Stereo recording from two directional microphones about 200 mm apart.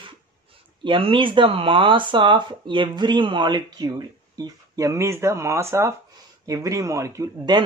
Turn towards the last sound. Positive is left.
turn(degrees=-20)  # may be behind; listen again after turning